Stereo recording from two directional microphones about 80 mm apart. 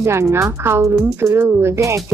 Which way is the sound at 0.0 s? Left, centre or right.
Right.